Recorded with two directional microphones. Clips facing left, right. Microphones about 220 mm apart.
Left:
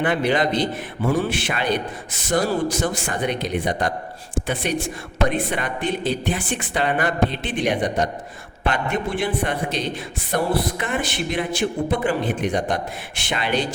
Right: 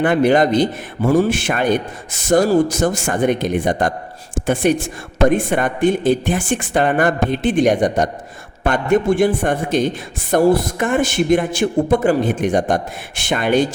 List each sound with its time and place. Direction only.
0.0 s a man's voice: 45° right (ahead or behind)